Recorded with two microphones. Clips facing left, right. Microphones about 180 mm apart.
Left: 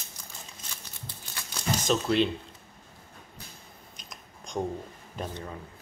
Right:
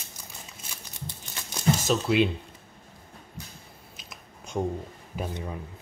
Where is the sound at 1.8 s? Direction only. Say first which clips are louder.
Even; 5° right (ahead or behind).